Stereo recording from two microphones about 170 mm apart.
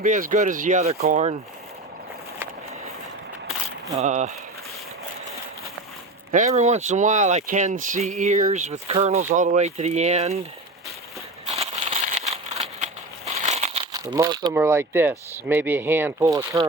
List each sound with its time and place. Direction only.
0.0 s speech: 50° right (ahead or behind)
0.9 s speech: 60° right (ahead or behind)
3.9 s speech: 45° right (ahead or behind)
6.3 s speech: 45° right (ahead or behind)
11.4 s crumpling: 35° right (ahead or behind)
13.9 s speech: 20° right (ahead or behind)